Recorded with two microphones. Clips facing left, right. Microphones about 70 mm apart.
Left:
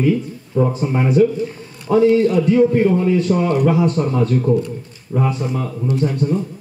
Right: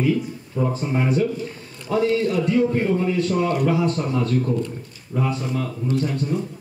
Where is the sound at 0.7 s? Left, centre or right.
Centre.